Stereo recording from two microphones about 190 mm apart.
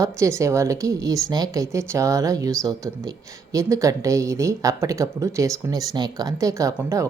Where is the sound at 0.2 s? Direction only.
15° right (ahead or behind).